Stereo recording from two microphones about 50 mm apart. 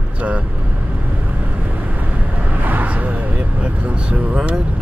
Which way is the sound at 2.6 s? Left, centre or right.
Right.